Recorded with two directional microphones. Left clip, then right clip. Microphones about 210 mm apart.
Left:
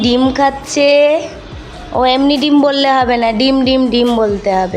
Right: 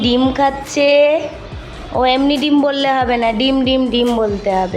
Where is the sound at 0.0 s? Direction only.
15° left (ahead or behind).